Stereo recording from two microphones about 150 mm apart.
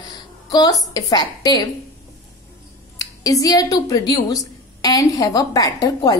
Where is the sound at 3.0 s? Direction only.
25° left (ahead or behind).